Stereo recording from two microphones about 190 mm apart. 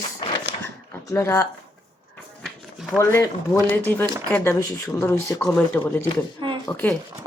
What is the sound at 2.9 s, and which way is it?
Speech, 15° left (ahead or behind).